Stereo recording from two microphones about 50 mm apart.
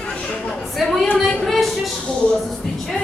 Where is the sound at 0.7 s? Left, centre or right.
Centre.